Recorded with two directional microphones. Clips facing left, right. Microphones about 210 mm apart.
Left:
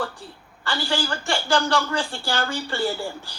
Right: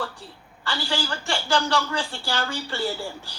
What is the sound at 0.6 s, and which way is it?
A man's voice, 50° left (ahead or behind).